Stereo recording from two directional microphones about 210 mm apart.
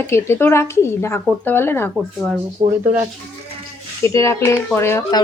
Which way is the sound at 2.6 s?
25° right (ahead or behind).